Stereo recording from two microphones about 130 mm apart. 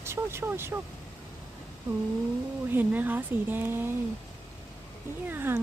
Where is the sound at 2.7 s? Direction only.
15° right (ahead or behind).